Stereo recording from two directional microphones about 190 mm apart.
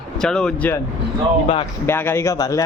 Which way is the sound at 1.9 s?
10° left (ahead or behind).